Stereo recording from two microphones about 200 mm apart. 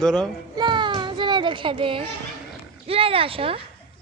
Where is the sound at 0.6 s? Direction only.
25° right (ahead or behind).